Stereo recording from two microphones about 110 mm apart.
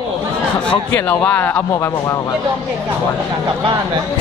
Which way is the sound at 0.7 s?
15° left (ahead or behind).